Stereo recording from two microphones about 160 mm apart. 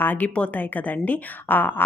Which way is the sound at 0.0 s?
10° left (ahead or behind).